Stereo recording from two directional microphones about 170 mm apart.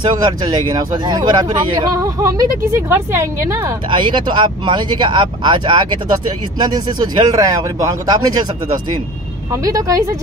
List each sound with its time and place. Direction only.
0.0 s speech: 25° right (ahead or behind)
3.9 s speech: 30° right (ahead or behind)
9.5 s speech: 20° right (ahead or behind)